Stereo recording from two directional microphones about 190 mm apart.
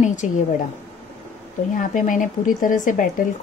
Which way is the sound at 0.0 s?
40° left (ahead or behind).